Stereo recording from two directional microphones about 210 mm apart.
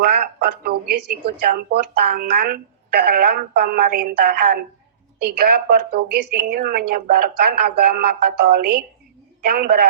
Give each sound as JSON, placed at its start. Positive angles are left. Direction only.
{"t": 0.0, "sound": "a woman's voice", "side_deg": -45}